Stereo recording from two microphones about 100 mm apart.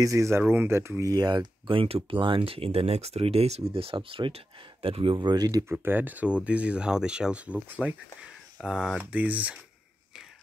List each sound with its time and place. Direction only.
0.0 s speech: 30° right (ahead or behind)
0.4 s speech: 20° right (ahead or behind); by 5.7 s 40° right (ahead or behind)
5.7 s speech: 20° right (ahead or behind)